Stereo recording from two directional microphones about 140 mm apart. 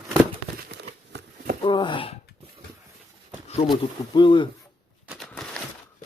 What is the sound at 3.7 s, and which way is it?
Speech, 35° left (ahead or behind).